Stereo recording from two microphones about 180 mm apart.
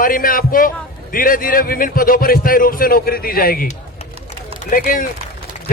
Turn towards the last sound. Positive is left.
turn(degrees=50)  # may be behind; listen again after turning